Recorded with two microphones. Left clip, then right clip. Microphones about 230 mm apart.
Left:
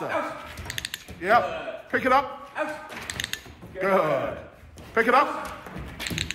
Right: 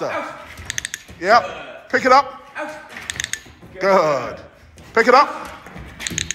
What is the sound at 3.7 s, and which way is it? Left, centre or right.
A woman's voice, centre.